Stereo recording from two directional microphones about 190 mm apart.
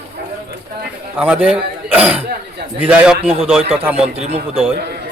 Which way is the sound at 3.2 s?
30° right (ahead or behind).